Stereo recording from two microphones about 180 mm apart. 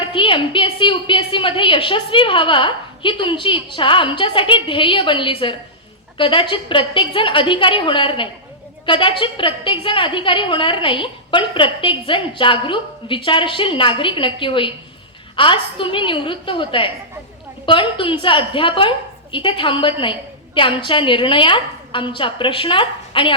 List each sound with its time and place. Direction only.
0.0 s a woman's voice: 30° left (ahead or behind)